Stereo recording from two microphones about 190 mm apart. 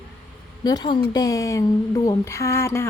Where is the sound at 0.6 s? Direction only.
20° left (ahead or behind).